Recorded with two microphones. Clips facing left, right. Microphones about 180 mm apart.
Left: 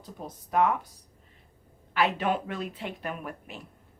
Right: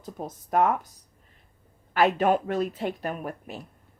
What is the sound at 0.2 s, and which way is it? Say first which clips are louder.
Speech: right 5 dB; 50° right (ahead or behind).